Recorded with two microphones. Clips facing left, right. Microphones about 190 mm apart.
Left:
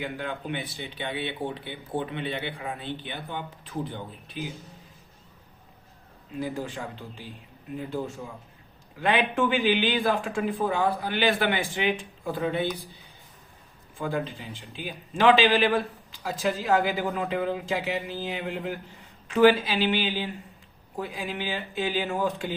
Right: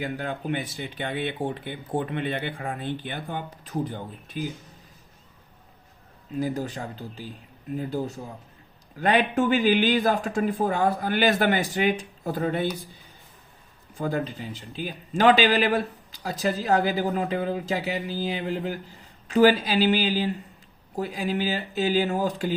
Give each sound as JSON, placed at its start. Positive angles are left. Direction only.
{"t": 0.0, "sound": "speech", "side_deg": -40}
{"t": 6.4, "sound": "a man's voice", "side_deg": -40}
{"t": 14.0, "sound": "a man's voice", "side_deg": -40}